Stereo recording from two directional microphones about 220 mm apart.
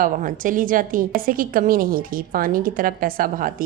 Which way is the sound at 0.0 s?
35° right (ahead or behind).